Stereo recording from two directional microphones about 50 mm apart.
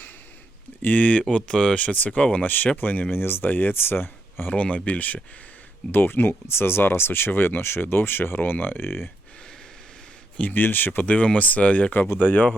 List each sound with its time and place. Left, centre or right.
0.8 s speech: left
1.3 s speech: centre; by 3.1 s left
3.1 s speech: left
4.5 s speech: left
5.9 s speech: left
10.5 s speech: left